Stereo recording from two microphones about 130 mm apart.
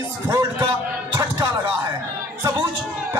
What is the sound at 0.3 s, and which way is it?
Speech, 30° right (ahead or behind).